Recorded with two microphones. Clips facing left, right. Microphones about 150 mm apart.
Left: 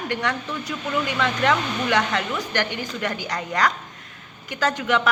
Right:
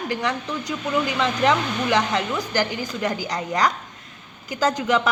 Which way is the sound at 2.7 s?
30° right (ahead or behind).